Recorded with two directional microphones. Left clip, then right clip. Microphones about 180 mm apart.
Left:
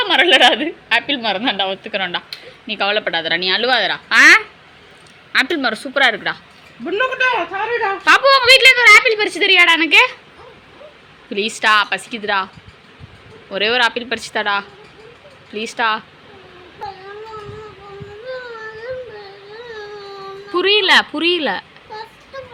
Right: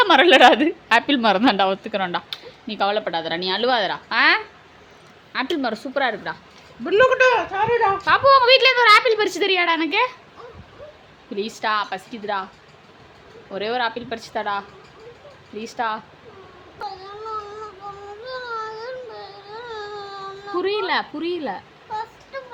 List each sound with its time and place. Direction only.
0.0 s a woman's voice: 35° right (ahead or behind)
1.9 s a woman's voice: 25° right (ahead or behind); by 6.3 s 5° right (ahead or behind)
6.8 s a man's voice: 70° right (ahead or behind)
8.0 s a woman's voice: 5° right (ahead or behind)
11.3 s a woman's voice: centre (ahead or behind)
13.5 s a woman's voice: centre (ahead or behind)
18.3 s a sound: 5° right (ahead or behind)
19.6 s a sound: 10° right (ahead or behind)
20.6 s a woman's voice: centre (ahead or behind)